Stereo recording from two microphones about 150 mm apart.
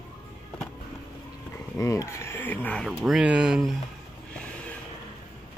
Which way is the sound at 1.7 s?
20° left (ahead or behind).